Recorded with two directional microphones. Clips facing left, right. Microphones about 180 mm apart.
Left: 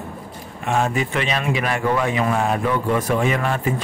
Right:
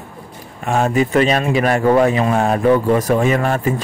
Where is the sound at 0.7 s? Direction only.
40° right (ahead or behind).